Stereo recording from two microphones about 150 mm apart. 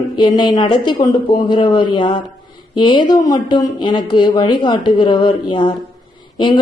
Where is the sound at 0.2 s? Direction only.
25° left (ahead or behind).